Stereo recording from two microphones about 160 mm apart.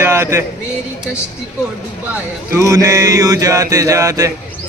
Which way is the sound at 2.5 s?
20° right (ahead or behind).